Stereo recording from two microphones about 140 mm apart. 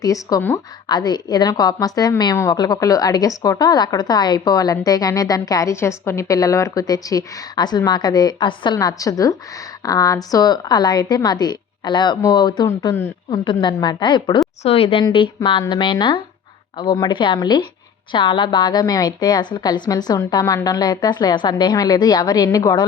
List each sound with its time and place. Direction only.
0.0 s a woman's voice: 25° left (ahead or behind)
12.6 s a woman's voice: 20° left (ahead or behind)
13.4 s a woman's voice: 35° left (ahead or behind)
14.6 s a woman's voice: 45° left (ahead or behind); by 22.8 s 25° left (ahead or behind)